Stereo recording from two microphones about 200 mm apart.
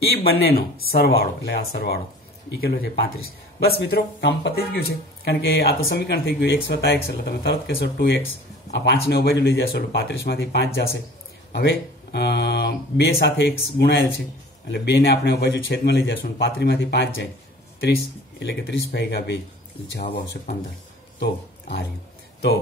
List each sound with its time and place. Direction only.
0.1 s speech: 50° left (ahead or behind)
18.4 s speech: 55° left (ahead or behind)
21.2 s speech: 55° left (ahead or behind)